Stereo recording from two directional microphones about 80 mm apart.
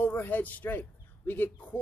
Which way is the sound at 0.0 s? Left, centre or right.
Left.